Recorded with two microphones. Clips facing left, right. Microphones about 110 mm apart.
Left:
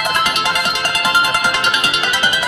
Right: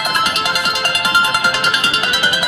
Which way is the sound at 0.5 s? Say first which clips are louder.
Even; 30° right (ahead or behind).